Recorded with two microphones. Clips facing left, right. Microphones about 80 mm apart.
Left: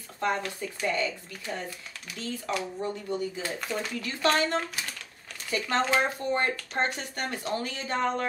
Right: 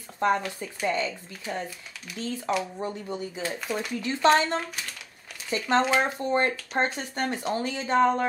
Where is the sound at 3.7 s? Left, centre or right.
Centre.